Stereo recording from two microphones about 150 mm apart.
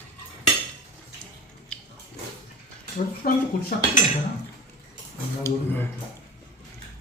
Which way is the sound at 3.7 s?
90° left.